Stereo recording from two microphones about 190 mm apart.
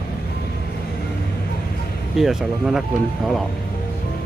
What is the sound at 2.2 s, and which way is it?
Speech, 5° right (ahead or behind).